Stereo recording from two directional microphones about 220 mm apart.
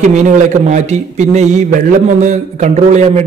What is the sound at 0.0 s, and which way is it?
A man's voice, 35° right (ahead or behind).